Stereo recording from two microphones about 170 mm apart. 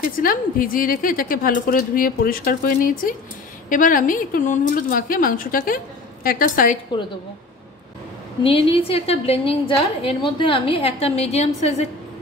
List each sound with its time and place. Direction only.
0.0 s a woman's voice: 55° left (ahead or behind)
8.5 s a woman's voice: 35° left (ahead or behind)